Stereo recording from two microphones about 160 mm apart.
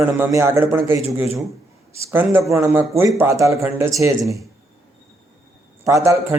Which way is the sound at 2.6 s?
15° right (ahead or behind).